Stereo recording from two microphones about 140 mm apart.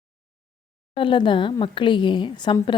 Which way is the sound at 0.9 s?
35° left (ahead or behind).